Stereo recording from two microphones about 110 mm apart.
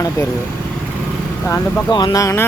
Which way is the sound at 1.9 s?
40° left (ahead or behind).